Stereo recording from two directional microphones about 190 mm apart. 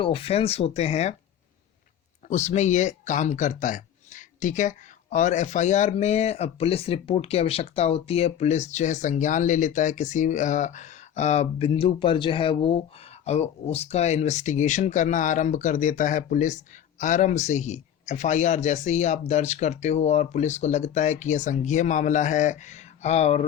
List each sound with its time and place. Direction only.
0.0 s speech: 30° left (ahead or behind)
2.3 s speech: 40° left (ahead or behind)